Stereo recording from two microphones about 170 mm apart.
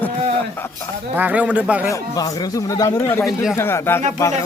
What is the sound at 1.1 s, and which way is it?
Speech, 10° right (ahead or behind).